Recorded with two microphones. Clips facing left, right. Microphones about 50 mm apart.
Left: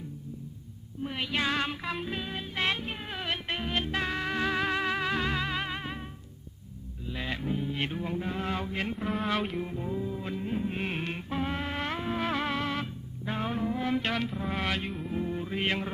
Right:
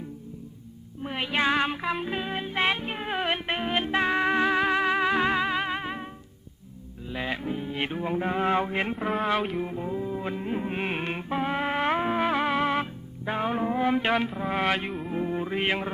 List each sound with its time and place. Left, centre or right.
1.0 s music: right
7.1 s music: centre
9.0 s music: centre; by 12.2 s right
12.2 s music: centre